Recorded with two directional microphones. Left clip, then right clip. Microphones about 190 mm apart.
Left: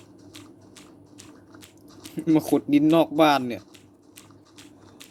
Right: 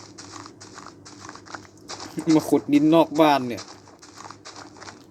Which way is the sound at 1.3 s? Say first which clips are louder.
Right 9 dB; 45° right (ahead or behind).